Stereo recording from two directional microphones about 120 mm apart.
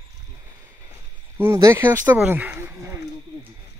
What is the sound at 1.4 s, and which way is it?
Speech, 25° right (ahead or behind).